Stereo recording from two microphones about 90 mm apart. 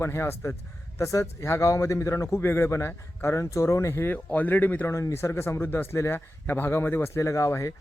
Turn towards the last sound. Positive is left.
turn(degrees=35)  # may be behind; listen again after turning